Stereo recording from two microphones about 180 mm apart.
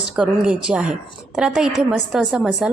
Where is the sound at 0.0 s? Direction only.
5° right (ahead or behind).